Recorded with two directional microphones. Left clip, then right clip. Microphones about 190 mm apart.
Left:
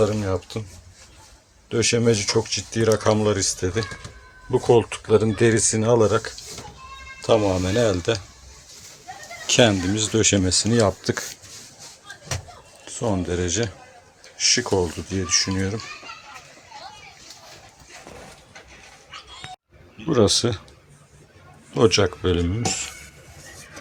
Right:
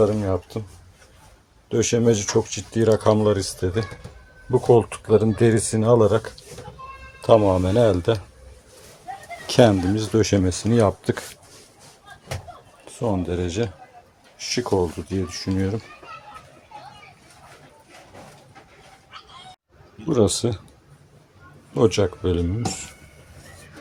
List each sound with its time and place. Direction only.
0.0 s speech: 15° right (ahead or behind)
1.7 s speech: 20° right (ahead or behind)
9.5 s speech: 15° right (ahead or behind)
12.8 s speech: 10° right (ahead or behind)
20.1 s speech: 10° right (ahead or behind)
21.8 s speech: 10° right (ahead or behind)